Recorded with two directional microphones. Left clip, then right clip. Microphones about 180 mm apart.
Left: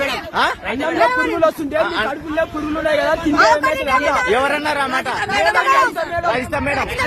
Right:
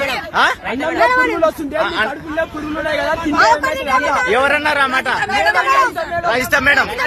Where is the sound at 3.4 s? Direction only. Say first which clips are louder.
Right 1 dB; 10° right (ahead or behind).